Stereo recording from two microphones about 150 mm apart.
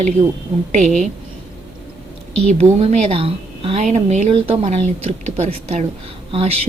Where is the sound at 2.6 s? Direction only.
40° right (ahead or behind).